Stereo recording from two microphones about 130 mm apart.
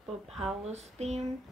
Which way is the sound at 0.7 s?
55° right (ahead or behind).